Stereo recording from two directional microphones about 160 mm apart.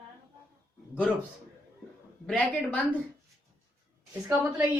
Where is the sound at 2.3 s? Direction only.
10° left (ahead or behind).